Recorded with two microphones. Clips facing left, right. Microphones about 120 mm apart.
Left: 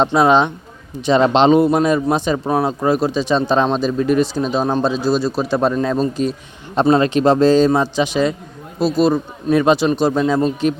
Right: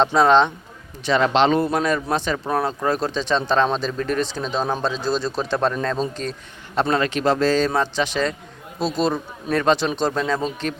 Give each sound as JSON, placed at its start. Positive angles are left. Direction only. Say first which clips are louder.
{"t": 0.0, "sound": "speech", "louder": "left 2 dB", "side_deg": 10}
{"t": 1.0, "sound": "speech", "louder": "left 5 dB", "side_deg": 20}
{"t": 6.9, "sound": "speech", "louder": "left 7 dB", "side_deg": 25}